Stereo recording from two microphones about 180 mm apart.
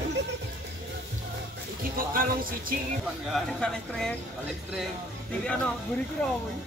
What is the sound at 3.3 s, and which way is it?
Speech, 5° left (ahead or behind).